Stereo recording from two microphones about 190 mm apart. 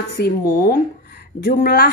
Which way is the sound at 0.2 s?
55° left (ahead or behind).